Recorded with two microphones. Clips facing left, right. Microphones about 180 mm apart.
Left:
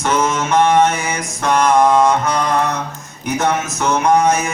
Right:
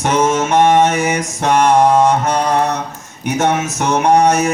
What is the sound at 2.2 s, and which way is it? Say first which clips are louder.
Mantra: right 2 dB; 35° right (ahead or behind).